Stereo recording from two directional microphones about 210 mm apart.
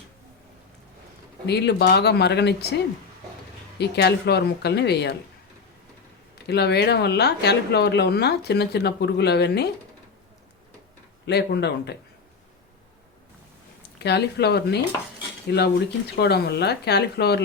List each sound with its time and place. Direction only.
1.5 s speech: 55° left (ahead or behind)
3.8 s speech: 50° left (ahead or behind)
6.5 s speech: 55° left (ahead or behind)
11.3 s speech: 50° left (ahead or behind)
14.0 s speech: 50° left (ahead or behind)